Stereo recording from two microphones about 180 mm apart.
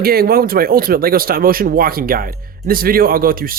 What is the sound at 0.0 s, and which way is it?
Speech, 55° right (ahead or behind).